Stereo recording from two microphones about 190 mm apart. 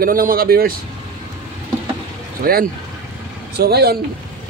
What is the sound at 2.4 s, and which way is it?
Speech, 50° right (ahead or behind).